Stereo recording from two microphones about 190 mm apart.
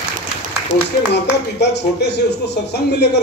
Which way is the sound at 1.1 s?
60° left (ahead or behind).